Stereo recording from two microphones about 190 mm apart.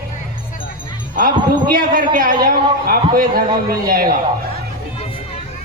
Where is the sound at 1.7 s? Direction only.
45° right (ahead or behind).